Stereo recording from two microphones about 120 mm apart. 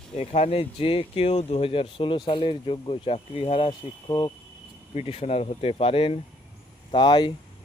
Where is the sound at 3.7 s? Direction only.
35° left (ahead or behind).